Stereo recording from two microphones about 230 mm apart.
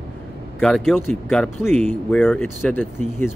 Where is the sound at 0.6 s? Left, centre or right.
Centre.